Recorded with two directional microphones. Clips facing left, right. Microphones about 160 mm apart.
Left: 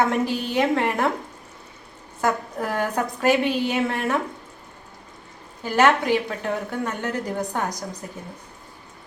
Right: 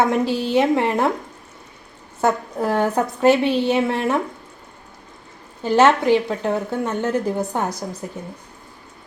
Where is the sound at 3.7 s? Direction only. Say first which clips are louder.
Right 4 dB; 20° right (ahead or behind).